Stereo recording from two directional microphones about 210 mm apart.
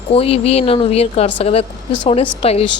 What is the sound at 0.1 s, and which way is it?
A woman's voice, 30° left (ahead or behind).